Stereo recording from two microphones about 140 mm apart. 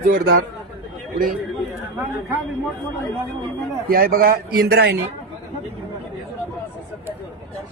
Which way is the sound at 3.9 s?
90° right.